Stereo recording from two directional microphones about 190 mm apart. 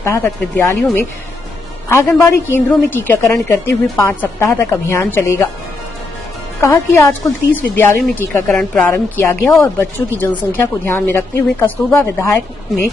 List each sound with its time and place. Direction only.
0.0 s a woman's voice: 10° left (ahead or behind)
1.9 s a woman's voice: 15° left (ahead or behind)
6.6 s a woman's voice: 15° left (ahead or behind)